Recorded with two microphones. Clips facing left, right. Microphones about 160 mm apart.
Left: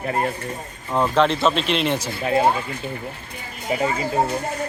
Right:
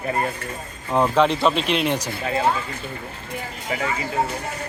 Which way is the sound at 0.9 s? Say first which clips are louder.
Right 1 dB; 10° right (ahead or behind).